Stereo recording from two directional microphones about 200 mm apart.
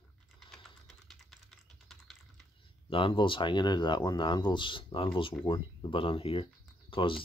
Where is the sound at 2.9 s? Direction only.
25° left (ahead or behind).